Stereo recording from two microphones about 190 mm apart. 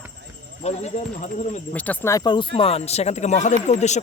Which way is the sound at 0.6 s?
35° left (ahead or behind).